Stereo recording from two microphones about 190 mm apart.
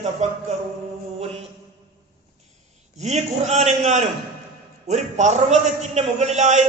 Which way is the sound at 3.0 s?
35° right (ahead or behind).